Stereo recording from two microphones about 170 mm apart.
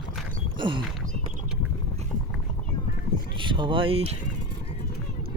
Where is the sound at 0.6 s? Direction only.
25° right (ahead or behind).